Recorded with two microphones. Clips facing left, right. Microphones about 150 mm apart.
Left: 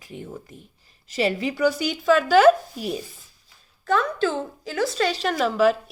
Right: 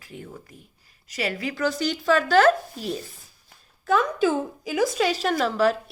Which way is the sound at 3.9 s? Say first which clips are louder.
Right 1 dB; 10° right (ahead or behind).